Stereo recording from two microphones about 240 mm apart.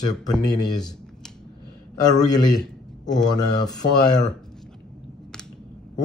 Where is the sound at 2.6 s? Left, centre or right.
Centre.